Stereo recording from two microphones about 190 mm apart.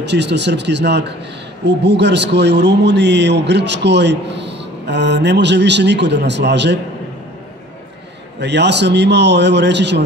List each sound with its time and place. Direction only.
0.0 s a man's voice: 65° right (ahead or behind)
8.4 s a man's voice: 65° right (ahead or behind)